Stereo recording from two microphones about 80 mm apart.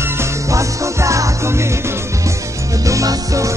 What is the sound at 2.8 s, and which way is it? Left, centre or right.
Music, right.